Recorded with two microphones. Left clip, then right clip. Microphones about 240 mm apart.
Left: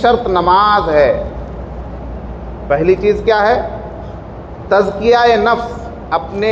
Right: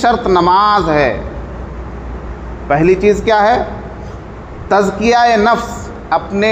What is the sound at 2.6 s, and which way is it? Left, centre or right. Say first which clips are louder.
Speech: right 1 dB; right.